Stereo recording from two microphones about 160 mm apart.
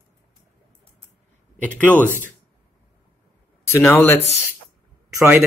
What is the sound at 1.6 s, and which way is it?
Speech, 10° left (ahead or behind).